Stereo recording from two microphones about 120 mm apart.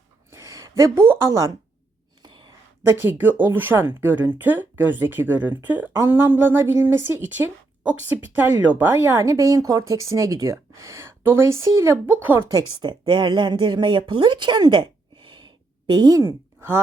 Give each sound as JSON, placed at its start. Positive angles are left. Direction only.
{"t": 0.3, "sound": "speech", "side_deg": -25}
{"t": 2.2, "sound": "a sound", "side_deg": -40}
{"t": 2.8, "sound": "a woman's voice", "side_deg": -20}
{"t": 12.4, "sound": "a woman's voice", "side_deg": -35}